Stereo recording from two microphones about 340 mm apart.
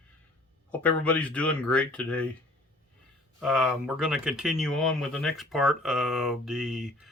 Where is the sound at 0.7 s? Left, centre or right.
Centre.